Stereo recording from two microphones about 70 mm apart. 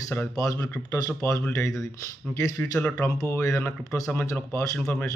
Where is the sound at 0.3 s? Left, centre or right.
Left.